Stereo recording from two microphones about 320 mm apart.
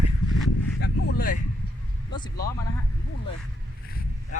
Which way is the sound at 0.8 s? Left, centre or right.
Left.